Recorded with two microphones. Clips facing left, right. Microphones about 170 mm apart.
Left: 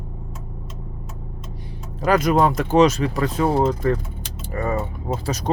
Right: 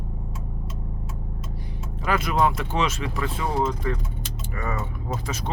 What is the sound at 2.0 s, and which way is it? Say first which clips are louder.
Speech: left 6 dB; 40° left (ahead or behind).